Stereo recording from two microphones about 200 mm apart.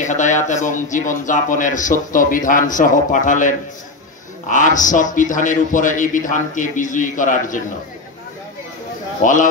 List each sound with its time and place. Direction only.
0.0 s speech: 40° left (ahead or behind)
9.2 s speech: 40° left (ahead or behind)